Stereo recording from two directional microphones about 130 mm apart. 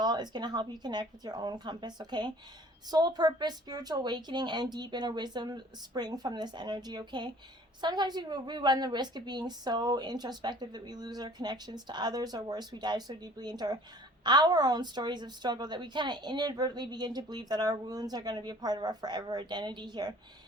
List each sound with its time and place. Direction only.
0.0 s a woman's voice: 35° right (ahead or behind)